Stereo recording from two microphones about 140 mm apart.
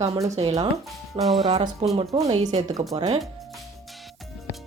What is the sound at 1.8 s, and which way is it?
Speech, 45° right (ahead or behind).